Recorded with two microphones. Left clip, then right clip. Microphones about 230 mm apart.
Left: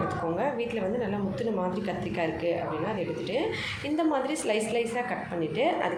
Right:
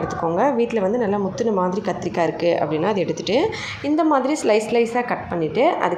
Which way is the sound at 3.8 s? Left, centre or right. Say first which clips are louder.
Right 10 dB; centre.